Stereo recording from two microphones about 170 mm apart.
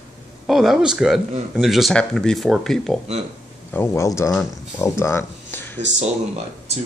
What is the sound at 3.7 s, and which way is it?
Speech, 15° left (ahead or behind).